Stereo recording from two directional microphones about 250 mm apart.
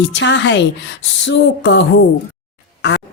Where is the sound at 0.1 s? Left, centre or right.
Left.